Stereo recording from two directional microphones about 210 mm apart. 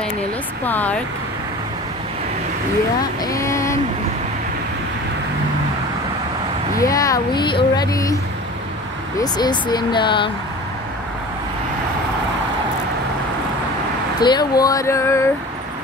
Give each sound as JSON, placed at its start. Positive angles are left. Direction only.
{"t": 0.7, "sound": "speech", "side_deg": 10}
{"t": 3.3, "sound": "a sound", "side_deg": 15}
{"t": 6.8, "sound": "speech", "side_deg": 15}
{"t": 9.2, "sound": "speech", "side_deg": 20}
{"t": 14.2, "sound": "speech", "side_deg": 20}